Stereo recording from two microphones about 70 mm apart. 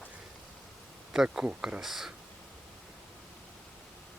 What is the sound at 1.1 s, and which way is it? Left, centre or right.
Speech, centre.